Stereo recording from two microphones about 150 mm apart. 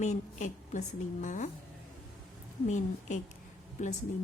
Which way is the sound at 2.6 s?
55° left (ahead or behind).